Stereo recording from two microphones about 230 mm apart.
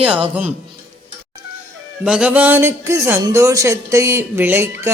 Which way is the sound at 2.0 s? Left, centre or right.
Centre.